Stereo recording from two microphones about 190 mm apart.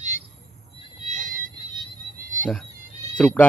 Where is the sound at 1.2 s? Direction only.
45° right (ahead or behind).